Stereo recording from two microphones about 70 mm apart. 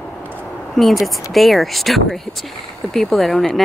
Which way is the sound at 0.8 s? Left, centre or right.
Centre.